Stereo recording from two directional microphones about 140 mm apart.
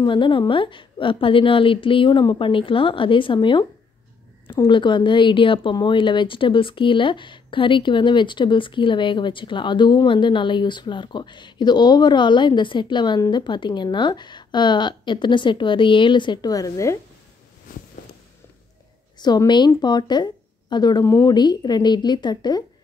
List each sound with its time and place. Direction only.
0.0 s speech: 35° left (ahead or behind)
4.6 s speech: 35° left (ahead or behind)
19.1 s a woman's voice: 30° left (ahead or behind)